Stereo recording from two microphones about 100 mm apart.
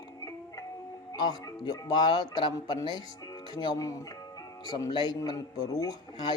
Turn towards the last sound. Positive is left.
turn(degrees=45)  # may be behind; listen again after turning